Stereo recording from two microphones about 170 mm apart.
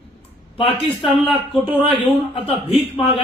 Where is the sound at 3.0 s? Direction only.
30° left (ahead or behind).